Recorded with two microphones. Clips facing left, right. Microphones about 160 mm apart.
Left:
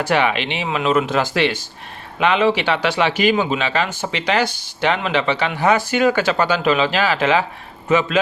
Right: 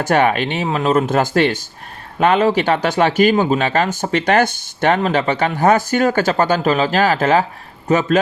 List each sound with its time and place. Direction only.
0.0 s speech: 45° right (ahead or behind)